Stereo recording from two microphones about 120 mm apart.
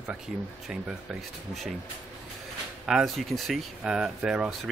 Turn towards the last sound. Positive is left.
turn(degrees=-5)  # may be behind; listen again after turning